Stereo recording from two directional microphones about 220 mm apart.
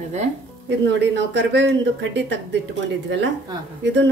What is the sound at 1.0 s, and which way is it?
Speech, 55° right (ahead or behind).